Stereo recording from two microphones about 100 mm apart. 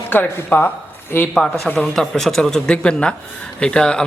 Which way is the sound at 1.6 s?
5° left (ahead or behind).